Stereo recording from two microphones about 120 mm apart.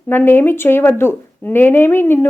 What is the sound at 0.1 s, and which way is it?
Speech, 15° left (ahead or behind).